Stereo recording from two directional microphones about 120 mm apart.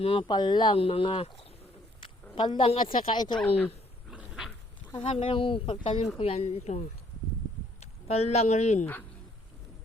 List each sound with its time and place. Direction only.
0.0 s speech: 45° left (ahead or behind)
2.3 s speech: 40° left (ahead or behind)
4.1 s dog: 10° right (ahead or behind)
5.0 s a woman's voice: 55° left (ahead or behind); by 8.9 s 70° left (ahead or behind)